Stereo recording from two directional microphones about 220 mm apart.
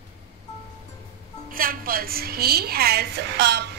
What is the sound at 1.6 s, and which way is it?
A woman's voice, 40° right (ahead or behind).